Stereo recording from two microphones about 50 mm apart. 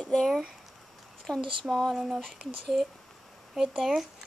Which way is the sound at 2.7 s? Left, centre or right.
Centre.